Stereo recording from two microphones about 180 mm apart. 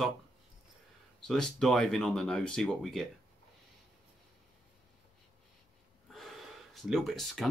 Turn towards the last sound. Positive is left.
turn(degrees=0)  # may be behind; listen again after turning